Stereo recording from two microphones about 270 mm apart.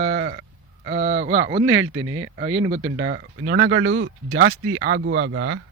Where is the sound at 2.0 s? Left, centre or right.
Right.